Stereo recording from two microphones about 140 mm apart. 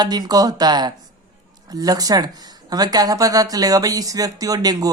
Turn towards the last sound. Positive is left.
turn(degrees=-25)  # may be behind; listen again after turning